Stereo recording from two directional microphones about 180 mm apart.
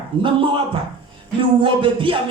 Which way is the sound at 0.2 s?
30° right (ahead or behind).